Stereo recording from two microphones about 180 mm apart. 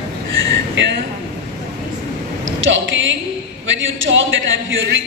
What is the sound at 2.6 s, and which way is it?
A man's voice, 90° right.